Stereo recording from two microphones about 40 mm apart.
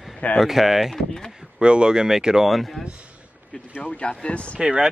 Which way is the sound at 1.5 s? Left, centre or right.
Right.